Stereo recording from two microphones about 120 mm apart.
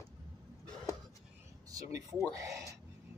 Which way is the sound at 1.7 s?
30° right (ahead or behind).